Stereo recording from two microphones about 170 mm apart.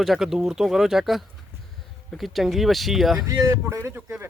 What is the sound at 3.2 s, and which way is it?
Speech, 15° right (ahead or behind).